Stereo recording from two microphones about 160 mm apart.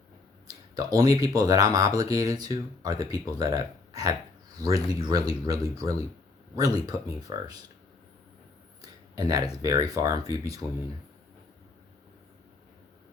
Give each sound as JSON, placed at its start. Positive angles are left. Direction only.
{"t": 0.8, "sound": "speech", "side_deg": -25}
{"t": 8.8, "sound": "speech", "side_deg": -25}